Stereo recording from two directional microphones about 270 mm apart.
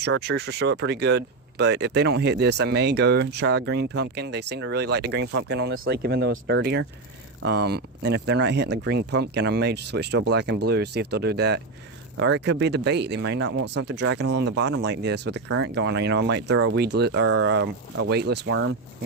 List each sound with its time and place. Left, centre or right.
0.0 s speech: right